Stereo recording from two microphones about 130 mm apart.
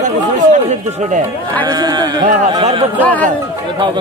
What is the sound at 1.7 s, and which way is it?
Speech, 30° right (ahead or behind).